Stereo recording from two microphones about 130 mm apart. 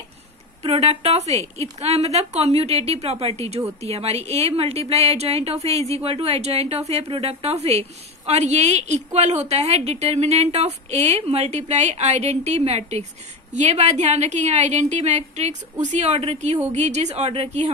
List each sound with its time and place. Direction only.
0.6 s a woman's voice: 50° right (ahead or behind)